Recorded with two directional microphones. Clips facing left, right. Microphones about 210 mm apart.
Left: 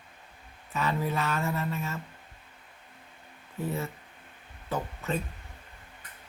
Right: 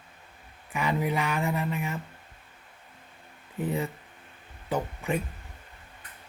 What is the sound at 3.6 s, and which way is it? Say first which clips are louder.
Speech: right 3 dB; 15° right (ahead or behind).